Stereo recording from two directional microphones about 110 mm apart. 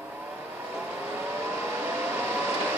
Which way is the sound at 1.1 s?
20° right (ahead or behind).